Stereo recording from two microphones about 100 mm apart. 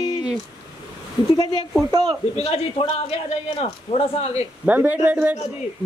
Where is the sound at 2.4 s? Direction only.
75° left (ahead or behind).